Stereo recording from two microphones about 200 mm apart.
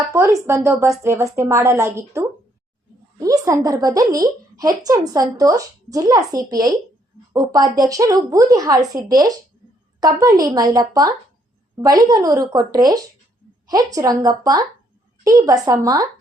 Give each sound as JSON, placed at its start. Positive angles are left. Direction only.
{"t": 0.1, "sound": "a woman's voice", "side_deg": -15}